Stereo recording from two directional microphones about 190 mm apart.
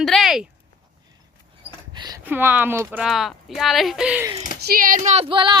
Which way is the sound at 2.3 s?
10° right (ahead or behind).